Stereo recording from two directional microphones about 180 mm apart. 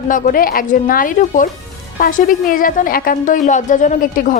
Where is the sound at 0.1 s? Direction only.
50° left (ahead or behind).